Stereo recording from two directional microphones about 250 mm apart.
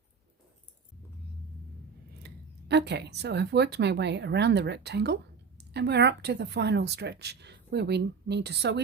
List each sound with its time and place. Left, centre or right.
2.2 s a woman's voice: right